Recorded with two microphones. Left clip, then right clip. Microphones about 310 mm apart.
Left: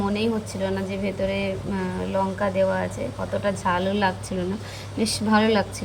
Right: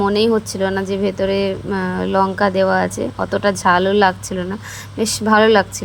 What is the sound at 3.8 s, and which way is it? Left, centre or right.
Speech, centre.